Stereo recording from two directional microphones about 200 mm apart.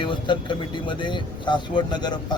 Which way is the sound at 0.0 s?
25° left (ahead or behind).